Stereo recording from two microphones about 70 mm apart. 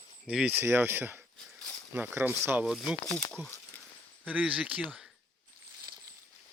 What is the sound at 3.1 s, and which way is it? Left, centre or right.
Speech, centre.